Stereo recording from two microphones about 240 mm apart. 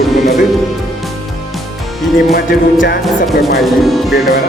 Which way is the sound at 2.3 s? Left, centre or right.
Left.